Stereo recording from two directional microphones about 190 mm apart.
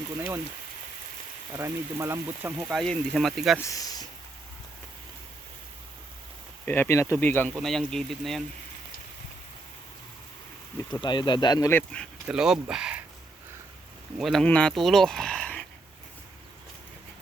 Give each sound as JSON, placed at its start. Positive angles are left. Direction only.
{"t": 1.5, "sound": "speech", "side_deg": -15}
{"t": 3.6, "sound": "speech", "side_deg": 20}
{"t": 6.7, "sound": "speech", "side_deg": 10}
{"t": 11.0, "sound": "speech", "side_deg": 25}
{"t": 14.2, "sound": "speech", "side_deg": 0}